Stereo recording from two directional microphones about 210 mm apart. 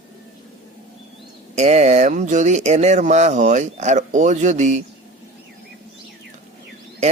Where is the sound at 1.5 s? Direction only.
30° right (ahead or behind).